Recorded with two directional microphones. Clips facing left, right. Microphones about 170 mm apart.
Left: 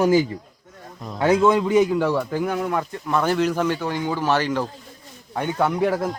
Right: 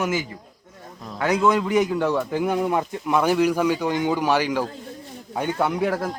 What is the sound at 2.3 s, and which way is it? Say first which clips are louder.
Speech: right 1 dB; 15° right (ahead or behind).